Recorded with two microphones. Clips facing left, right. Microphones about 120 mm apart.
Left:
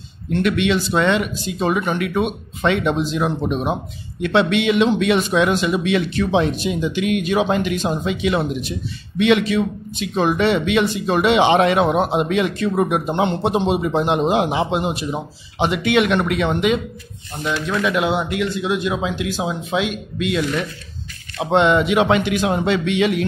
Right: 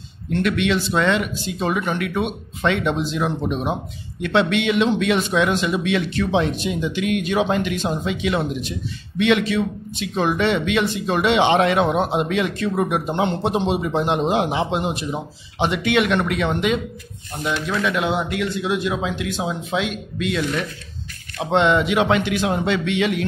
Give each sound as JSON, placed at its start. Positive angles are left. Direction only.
{"t": 0.3, "sound": "speech", "side_deg": 10}
{"t": 17.4, "sound": "speech", "side_deg": -15}
{"t": 17.7, "sound": "speech", "side_deg": 10}